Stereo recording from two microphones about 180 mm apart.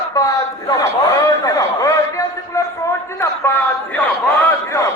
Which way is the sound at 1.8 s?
15° left (ahead or behind).